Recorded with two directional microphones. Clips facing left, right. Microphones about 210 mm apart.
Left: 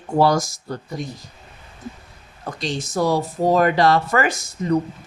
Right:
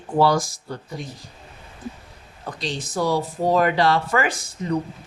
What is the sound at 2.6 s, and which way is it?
Speech, 45° left (ahead or behind).